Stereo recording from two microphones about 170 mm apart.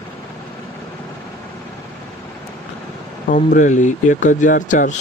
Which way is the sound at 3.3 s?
45° left (ahead or behind).